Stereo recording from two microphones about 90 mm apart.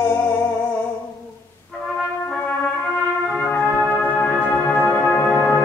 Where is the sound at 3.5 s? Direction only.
15° left (ahead or behind).